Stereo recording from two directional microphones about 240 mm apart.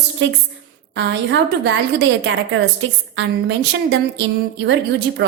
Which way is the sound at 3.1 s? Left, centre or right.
Right.